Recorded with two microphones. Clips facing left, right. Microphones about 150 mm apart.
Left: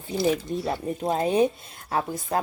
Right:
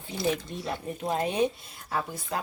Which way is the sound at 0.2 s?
30° left (ahead or behind).